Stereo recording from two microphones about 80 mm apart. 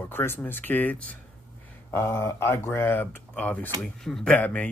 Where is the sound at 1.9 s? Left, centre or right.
Left.